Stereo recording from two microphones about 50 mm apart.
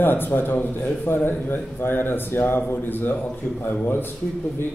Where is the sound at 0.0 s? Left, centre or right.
Left.